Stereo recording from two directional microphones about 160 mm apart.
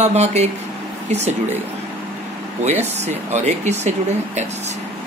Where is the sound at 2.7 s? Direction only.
45° right (ahead or behind).